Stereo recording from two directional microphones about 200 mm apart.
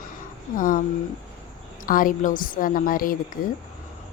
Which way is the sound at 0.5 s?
45° left (ahead or behind).